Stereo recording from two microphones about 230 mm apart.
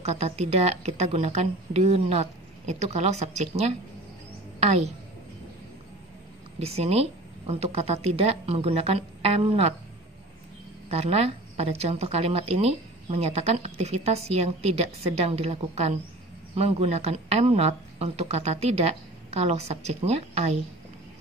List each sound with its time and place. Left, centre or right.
0.0 s a woman's voice: right
6.6 s a woman's voice: right
10.9 s a woman's voice: right